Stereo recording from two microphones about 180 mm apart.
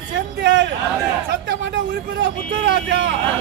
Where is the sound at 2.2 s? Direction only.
85° right.